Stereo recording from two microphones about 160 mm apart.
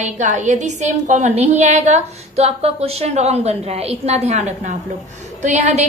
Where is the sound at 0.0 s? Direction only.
45° right (ahead or behind).